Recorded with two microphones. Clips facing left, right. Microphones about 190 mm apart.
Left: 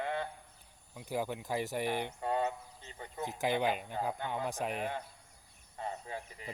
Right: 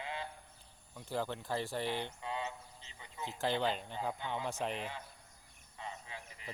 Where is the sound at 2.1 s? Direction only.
50° left (ahead or behind).